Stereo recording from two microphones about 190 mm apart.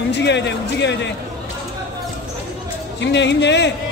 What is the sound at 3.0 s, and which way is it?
Speech, 65° left (ahead or behind).